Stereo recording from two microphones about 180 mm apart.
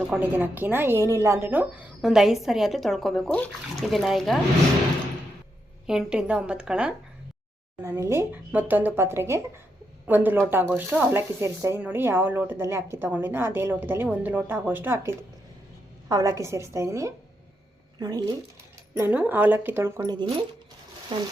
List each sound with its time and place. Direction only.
0.1 s speech: 10° right (ahead or behind)
5.8 s a woman's voice: 5° right (ahead or behind); by 18.3 s 20° right (ahead or behind)
18.9 s a woman's voice: 10° right (ahead or behind)
21.1 s speech: 30° right (ahead or behind)